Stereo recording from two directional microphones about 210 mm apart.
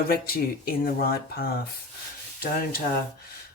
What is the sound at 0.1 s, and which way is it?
Speech, 45° left (ahead or behind).